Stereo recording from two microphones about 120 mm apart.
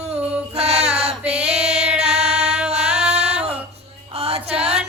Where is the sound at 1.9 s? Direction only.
60° right (ahead or behind).